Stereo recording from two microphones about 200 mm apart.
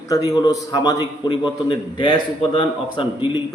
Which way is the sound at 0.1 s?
20° left (ahead or behind).